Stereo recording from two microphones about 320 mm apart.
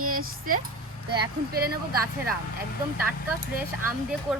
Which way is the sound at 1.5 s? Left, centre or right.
Right.